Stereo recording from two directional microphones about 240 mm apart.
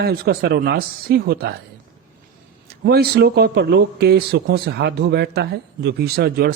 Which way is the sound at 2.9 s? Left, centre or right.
Right.